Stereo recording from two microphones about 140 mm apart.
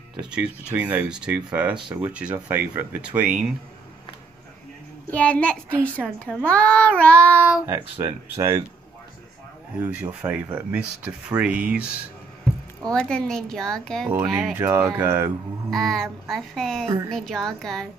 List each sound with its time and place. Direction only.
0.2 s speech: 5° right (ahead or behind)
5.1 s a child's voice: 10° left (ahead or behind)
7.6 s speech: 20° right (ahead or behind)
9.8 s speech: 10° right (ahead or behind)
12.9 s speech: 5° left (ahead or behind)
14.5 s speech: 15° right (ahead or behind)
15.7 s speech: 5° left (ahead or behind)